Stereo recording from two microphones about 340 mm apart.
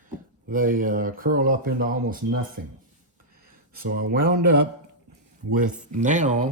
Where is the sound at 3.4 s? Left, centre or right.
Right.